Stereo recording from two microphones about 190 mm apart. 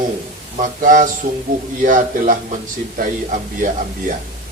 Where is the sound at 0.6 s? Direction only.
45° right (ahead or behind).